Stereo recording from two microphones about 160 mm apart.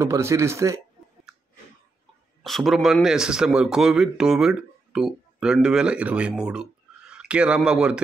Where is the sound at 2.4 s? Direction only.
Centre (ahead or behind).